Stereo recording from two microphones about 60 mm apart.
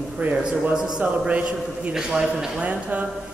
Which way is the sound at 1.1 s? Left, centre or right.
Right.